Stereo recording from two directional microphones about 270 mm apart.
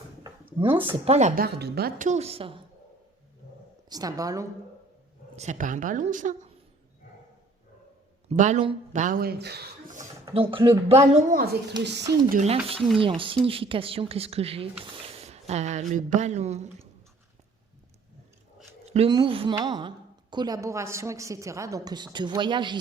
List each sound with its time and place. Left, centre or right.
0.2 s a sound: centre
0.8 s a woman's voice: right
3.8 s a woman's voice: centre
5.4 s a woman's voice: right
8.3 s a woman's voice: right
10.2 s a woman's voice: centre; by 12.0 s right
12.3 s a woman's voice: right
18.9 s a woman's voice: right